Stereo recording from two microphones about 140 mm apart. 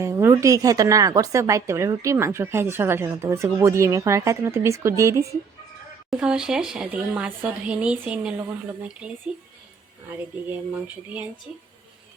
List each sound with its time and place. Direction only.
0.0 s speech: 20° right (ahead or behind)
6.1 s a woman's voice: 5° right (ahead or behind)
10.8 s a woman's voice: 10° right (ahead or behind)